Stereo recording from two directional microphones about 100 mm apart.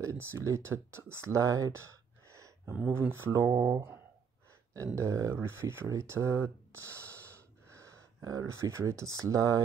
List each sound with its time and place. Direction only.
0.0 s speech: 30° right (ahead or behind)
2.3 s a sound: 30° right (ahead or behind)
2.9 s speech: 25° right (ahead or behind)